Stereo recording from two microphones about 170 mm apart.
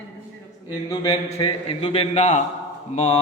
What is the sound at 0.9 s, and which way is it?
A man's voice, 30° left (ahead or behind).